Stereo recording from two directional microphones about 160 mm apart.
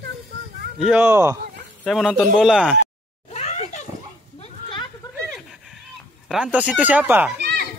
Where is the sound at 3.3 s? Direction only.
45° left (ahead or behind).